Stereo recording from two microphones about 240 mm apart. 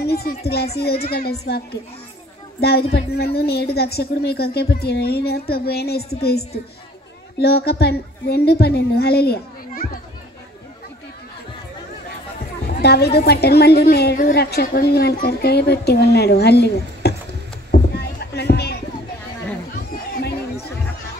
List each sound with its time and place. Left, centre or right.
0.0 s a woman's voice: left
12.8 s a woman's voice: left
17.6 s a sound: left